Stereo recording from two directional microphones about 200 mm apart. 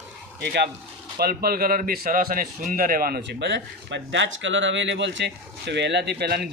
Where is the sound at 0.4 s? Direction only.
55° right (ahead or behind).